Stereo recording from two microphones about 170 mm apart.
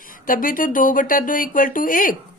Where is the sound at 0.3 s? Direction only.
55° left (ahead or behind).